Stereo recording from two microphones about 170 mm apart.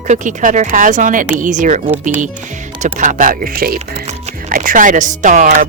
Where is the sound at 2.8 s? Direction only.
50° right (ahead or behind).